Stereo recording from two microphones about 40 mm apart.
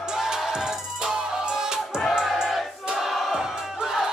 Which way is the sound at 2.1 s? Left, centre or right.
Centre.